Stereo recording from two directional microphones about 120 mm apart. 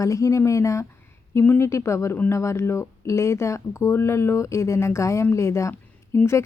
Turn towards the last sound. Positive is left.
turn(degrees=20)  # may be behind; listen again after turning